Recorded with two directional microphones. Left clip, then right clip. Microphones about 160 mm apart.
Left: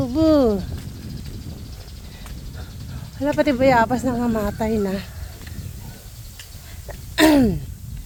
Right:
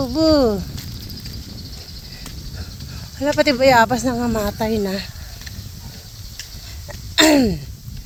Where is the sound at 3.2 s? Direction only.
5° right (ahead or behind).